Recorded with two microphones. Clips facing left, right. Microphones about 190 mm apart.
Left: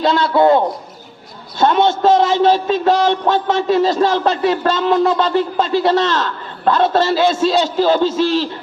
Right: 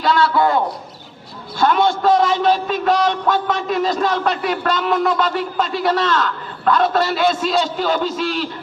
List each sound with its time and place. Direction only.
0.0 s a man's voice: 25° left (ahead or behind)